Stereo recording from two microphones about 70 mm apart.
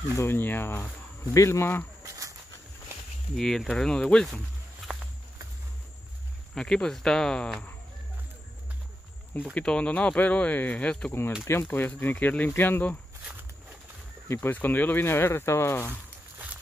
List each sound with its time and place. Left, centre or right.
0.2 s speech: left
1.3 s speech: left
2.0 s a sound: right
3.3 s speech: centre
4.8 s walk: centre
6.5 s speech: centre
9.4 s speech: centre
11.7 s speech: left
14.2 s speech: left